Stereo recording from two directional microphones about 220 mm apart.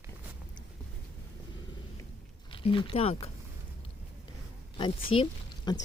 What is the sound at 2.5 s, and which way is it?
Speech, 25° left (ahead or behind).